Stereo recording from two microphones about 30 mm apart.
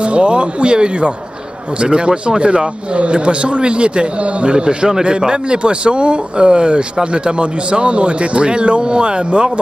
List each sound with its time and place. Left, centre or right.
0.0 s speech: right